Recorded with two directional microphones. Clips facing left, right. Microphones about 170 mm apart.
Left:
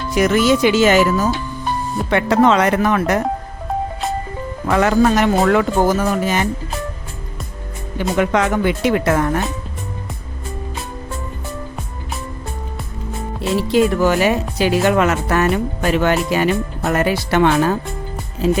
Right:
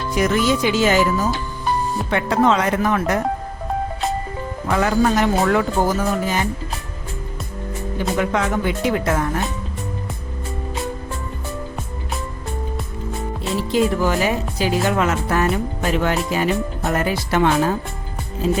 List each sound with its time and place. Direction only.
0.1 s speech: 80° left
2.0 s speech: 80° left
4.8 s speech: 70° left (ahead or behind)
7.9 s speech: 80° left
13.6 s speech: 70° left (ahead or behind)